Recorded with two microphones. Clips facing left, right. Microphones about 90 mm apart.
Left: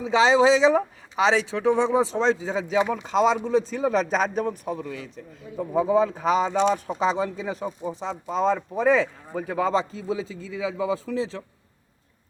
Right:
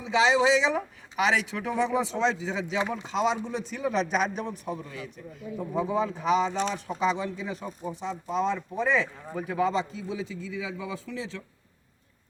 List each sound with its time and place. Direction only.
0.0 s speech: 40° left (ahead or behind)
5.0 s speech: 35° left (ahead or behind)